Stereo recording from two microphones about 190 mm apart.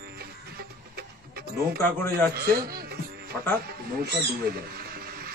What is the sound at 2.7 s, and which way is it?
Music, 55° right (ahead or behind).